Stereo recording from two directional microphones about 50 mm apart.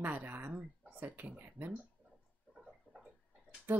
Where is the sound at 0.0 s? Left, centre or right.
Right.